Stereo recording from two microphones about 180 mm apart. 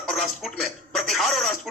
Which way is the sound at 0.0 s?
Centre (ahead or behind).